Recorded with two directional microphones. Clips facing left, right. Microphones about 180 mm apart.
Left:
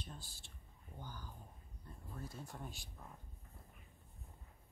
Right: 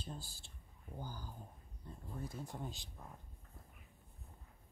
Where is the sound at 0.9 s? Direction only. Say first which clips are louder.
Right 4 dB; 35° right (ahead or behind).